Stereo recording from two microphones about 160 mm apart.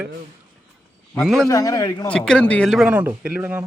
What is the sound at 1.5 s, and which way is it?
Speech, 20° left (ahead or behind).